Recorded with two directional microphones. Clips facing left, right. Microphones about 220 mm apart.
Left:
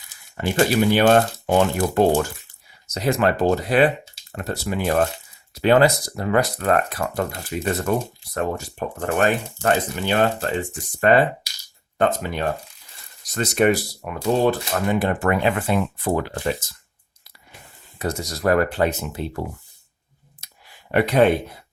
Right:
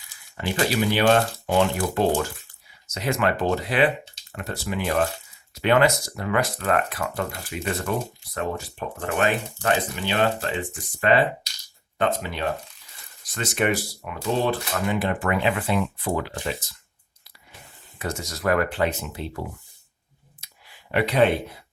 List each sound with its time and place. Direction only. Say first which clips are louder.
0.4 s speech: left 5 dB; 45° left (ahead or behind)
18.0 s speech: left 4 dB; 35° left (ahead or behind)
20.9 s speech: left 3 dB; 45° left (ahead or behind)